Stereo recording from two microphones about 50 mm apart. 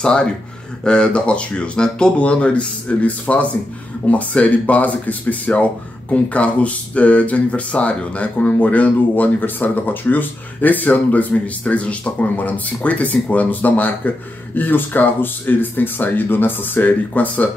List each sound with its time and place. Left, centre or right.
0.0 s speech: centre; by 17.5 s left